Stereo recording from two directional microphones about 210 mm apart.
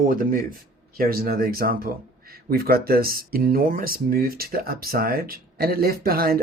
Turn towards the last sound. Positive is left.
turn(degrees=-45)  # may be behind; listen again after turning